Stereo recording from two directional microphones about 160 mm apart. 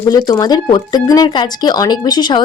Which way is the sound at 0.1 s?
25° left (ahead or behind).